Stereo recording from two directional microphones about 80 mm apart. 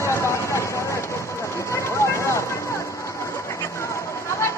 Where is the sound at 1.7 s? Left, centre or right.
Left.